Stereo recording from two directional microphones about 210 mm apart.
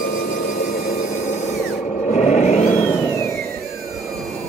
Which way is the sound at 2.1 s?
35° left (ahead or behind).